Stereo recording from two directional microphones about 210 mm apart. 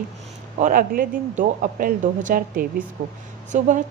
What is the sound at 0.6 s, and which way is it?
A woman's voice, 40° right (ahead or behind).